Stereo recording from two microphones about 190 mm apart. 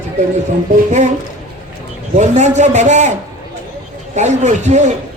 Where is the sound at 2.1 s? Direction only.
40° right (ahead or behind).